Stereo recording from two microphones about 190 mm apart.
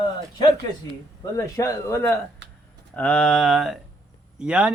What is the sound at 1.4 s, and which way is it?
A man's voice, 15° left (ahead or behind).